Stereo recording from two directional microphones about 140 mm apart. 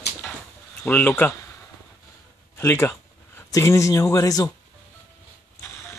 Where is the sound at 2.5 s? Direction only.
15° left (ahead or behind).